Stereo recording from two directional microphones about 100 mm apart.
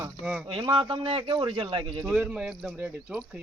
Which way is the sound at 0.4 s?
55° right (ahead or behind).